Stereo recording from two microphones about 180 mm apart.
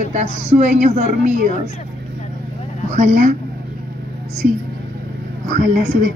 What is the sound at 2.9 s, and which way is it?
Speech, 45° right (ahead or behind).